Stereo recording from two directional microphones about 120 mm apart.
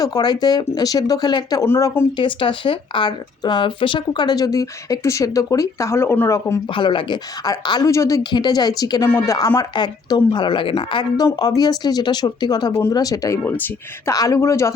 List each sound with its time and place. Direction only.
0.0 s speech: 35° left (ahead or behind)
1.6 s speech: 20° left (ahead or behind)
2.1 s speech: 45° left (ahead or behind); by 6.6 s 25° left (ahead or behind)
6.7 s speech: 40° left (ahead or behind)
9.0 s speech: 20° left (ahead or behind); by 11.0 s 50° left (ahead or behind)
11.3 s speech: 35° left (ahead or behind)
13.4 s speech: 15° left (ahead or behind)
14.1 s speech: 30° left (ahead or behind)